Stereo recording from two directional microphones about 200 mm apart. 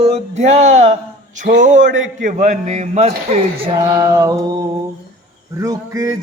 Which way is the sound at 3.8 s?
15° right (ahead or behind).